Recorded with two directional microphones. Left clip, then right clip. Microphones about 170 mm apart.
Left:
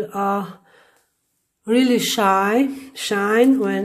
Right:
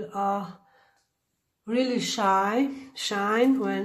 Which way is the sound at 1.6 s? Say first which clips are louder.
Left 9 dB; 70° left (ahead or behind).